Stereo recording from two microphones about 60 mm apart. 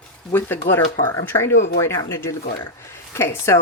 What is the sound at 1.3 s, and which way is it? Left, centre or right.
A woman's voice, left.